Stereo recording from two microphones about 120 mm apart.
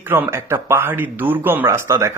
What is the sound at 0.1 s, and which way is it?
Speech, 20° right (ahead or behind).